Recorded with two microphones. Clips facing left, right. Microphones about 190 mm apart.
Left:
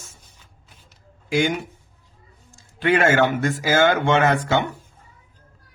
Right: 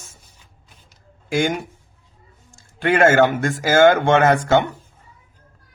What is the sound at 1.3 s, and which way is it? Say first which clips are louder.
Speech: right 1 dB; 45° right (ahead or behind).